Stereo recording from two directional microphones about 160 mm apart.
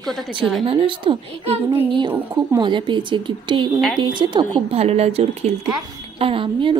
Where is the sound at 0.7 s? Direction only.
35° right (ahead or behind).